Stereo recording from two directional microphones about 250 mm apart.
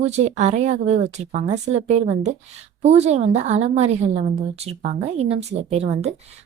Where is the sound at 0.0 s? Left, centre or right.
Right.